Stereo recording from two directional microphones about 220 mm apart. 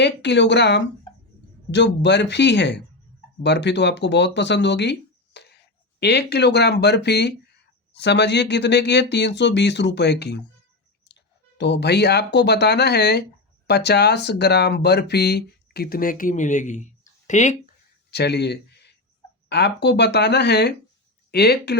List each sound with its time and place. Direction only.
0.0 s speech: 50° left (ahead or behind); by 17.6 s 35° left (ahead or behind)
18.1 s speech: 50° left (ahead or behind)